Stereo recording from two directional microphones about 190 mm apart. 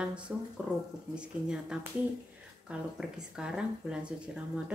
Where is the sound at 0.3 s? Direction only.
5° right (ahead or behind).